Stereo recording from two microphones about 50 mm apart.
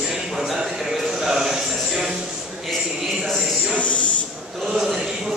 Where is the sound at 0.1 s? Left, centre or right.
Centre.